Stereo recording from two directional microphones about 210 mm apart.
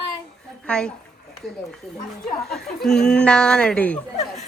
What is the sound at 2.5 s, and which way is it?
Speech, centre (ahead or behind).